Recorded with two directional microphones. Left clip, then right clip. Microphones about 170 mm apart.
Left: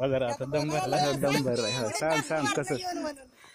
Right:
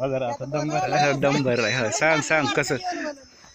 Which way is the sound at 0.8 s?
20° right (ahead or behind).